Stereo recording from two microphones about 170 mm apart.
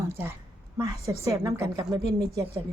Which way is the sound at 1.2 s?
20° right (ahead or behind).